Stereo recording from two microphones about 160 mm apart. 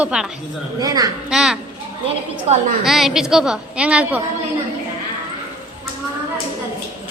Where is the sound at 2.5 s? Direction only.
40° right (ahead or behind).